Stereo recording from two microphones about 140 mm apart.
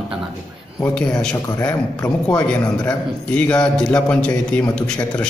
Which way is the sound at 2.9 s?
10° left (ahead or behind).